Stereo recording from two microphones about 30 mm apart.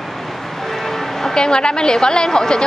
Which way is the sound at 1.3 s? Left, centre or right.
Left.